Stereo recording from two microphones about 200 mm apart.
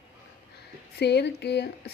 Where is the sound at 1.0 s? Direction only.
55° left (ahead or behind).